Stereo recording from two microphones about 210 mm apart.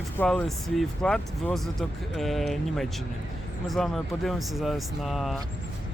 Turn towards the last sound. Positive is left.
turn(degrees=0)  # may be behind; listen again after turning